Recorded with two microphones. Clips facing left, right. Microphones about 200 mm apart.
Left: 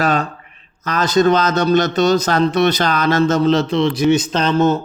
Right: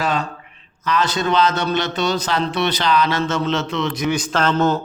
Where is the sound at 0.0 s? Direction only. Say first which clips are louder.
Left 4 dB; 45° left (ahead or behind).